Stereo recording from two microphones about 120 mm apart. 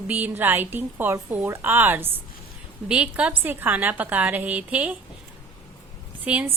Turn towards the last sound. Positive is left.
turn(degrees=-10)  # may be behind; listen again after turning